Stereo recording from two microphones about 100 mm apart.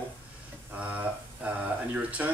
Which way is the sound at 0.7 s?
15° right (ahead or behind).